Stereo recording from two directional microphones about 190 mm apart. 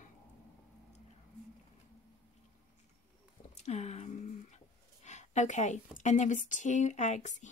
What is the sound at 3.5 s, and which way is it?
Speech, 35° left (ahead or behind).